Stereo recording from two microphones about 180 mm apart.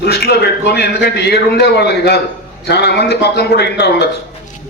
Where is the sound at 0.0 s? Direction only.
60° left (ahead or behind).